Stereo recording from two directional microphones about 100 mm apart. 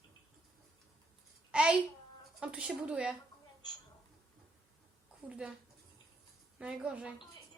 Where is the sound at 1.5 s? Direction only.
10° right (ahead or behind).